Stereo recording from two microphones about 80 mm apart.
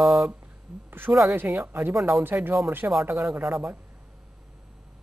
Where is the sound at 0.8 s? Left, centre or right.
Right.